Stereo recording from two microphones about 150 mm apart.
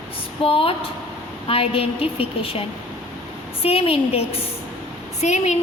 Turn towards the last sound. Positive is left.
turn(degrees=50)  # may be behind; listen again after turning